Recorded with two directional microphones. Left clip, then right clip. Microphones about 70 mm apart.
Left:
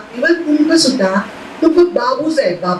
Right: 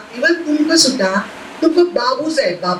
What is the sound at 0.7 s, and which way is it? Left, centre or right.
Speech, centre.